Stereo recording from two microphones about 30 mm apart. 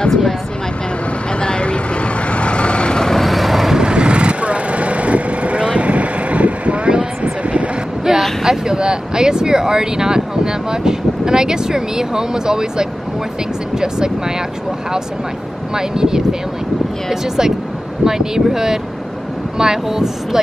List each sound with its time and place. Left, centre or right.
1.4 s vehicle: left
3.2 s vehicle: centre
3.7 s vehicle: right
8.1 s vehicle: centre
8.5 s speech: right
15.7 s speech: right